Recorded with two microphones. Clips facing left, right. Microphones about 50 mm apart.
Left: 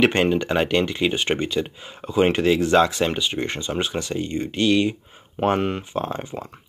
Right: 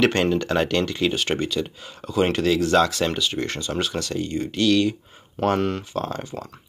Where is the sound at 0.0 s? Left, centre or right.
Centre.